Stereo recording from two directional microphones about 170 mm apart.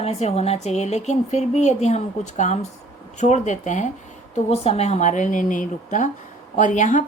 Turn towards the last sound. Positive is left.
turn(degrees=45)  # may be behind; listen again after turning